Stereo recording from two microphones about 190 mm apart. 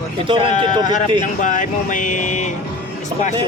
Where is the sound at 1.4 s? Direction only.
45° left (ahead or behind).